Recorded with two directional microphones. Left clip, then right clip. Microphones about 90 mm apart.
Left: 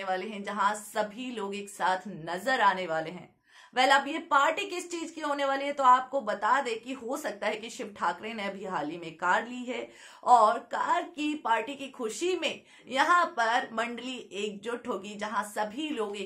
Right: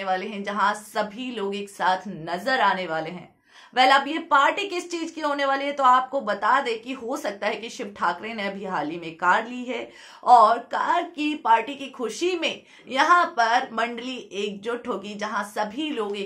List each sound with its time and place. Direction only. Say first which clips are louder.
0.0 s a woman's voice: right 6 dB; 25° right (ahead or behind)